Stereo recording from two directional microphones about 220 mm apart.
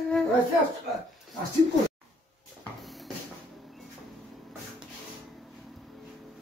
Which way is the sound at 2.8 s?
Centre (ahead or behind).